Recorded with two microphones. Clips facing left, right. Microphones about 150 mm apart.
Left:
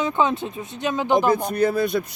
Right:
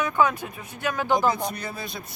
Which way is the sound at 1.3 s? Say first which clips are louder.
Left 11 dB; 50° left (ahead or behind).